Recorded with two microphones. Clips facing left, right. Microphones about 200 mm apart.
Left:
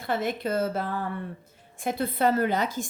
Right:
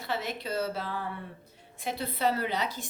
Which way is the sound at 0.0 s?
50° left (ahead or behind).